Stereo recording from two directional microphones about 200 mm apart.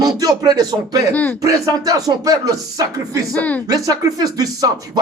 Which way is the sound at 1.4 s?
15° right (ahead or behind).